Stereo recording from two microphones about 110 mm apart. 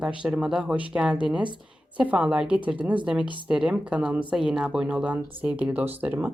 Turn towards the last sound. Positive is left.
turn(degrees=-15)  # may be behind; listen again after turning